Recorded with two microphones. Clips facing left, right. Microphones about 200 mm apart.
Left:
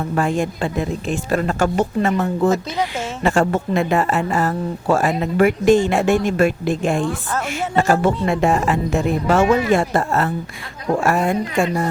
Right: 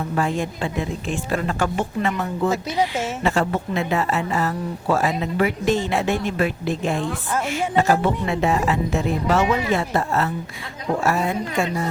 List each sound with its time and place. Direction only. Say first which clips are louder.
0.2 s speech: left 4 dB; 50° left (ahead or behind)